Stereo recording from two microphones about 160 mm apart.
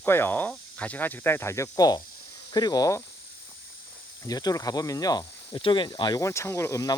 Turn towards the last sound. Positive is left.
turn(degrees=20)  # may be behind; listen again after turning